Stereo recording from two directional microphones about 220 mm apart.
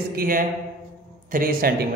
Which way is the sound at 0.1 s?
40° right (ahead or behind).